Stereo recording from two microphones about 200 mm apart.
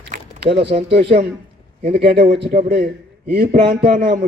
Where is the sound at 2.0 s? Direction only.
55° right (ahead or behind).